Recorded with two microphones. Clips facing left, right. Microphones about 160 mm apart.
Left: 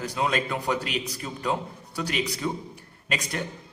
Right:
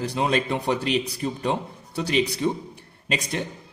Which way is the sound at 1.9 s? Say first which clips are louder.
Right 6 dB; 25° right (ahead or behind).